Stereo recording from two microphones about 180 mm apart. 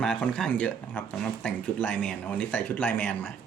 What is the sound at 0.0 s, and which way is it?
Speech, 5° left (ahead or behind).